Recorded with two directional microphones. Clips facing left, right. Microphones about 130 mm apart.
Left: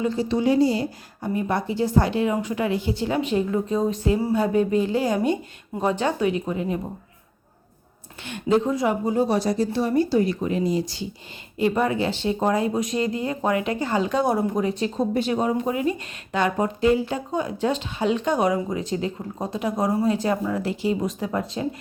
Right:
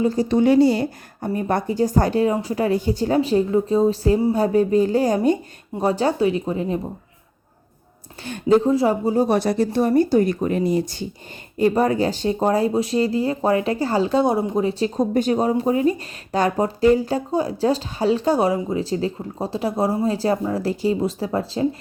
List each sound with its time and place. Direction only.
0.0 s speech: 40° right (ahead or behind); by 1.3 s 65° right (ahead or behind)
1.3 s speech: 45° right (ahead or behind)
8.2 s speech: 40° right (ahead or behind)
9.2 s speech: 60° right (ahead or behind)
9.6 s speech: 45° right (ahead or behind)
11.5 s speech: 40° right (ahead or behind)